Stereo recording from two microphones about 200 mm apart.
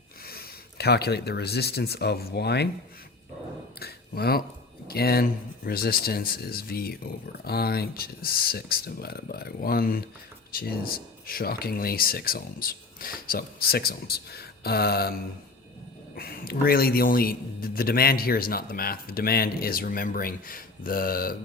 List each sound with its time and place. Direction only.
0.3 s speech: 50° left (ahead or behind)
3.8 s a sound: 50° left (ahead or behind)
4.9 s speech: 50° left (ahead or behind)